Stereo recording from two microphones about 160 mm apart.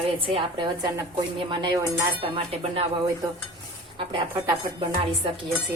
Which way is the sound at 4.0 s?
30° right (ahead or behind).